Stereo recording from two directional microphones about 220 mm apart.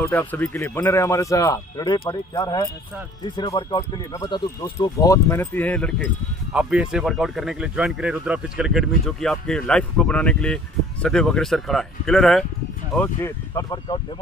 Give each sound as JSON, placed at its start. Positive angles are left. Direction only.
{"t": 0.0, "sound": "speech", "side_deg": 10}